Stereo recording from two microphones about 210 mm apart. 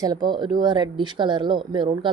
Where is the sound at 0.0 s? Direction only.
20° right (ahead or behind).